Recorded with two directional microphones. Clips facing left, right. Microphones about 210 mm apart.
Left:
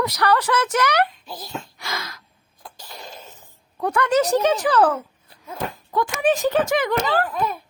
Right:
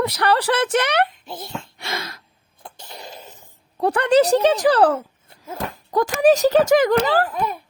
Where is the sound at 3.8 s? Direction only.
35° right (ahead or behind).